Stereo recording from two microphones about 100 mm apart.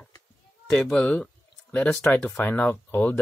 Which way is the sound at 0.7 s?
10° left (ahead or behind).